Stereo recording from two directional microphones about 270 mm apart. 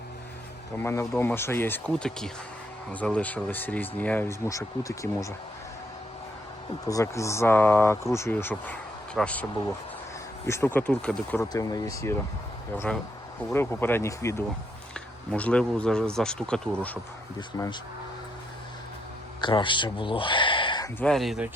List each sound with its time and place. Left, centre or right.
0.8 s speech: centre
6.8 s speech: centre
19.4 s speech: centre
21.0 s speech: centre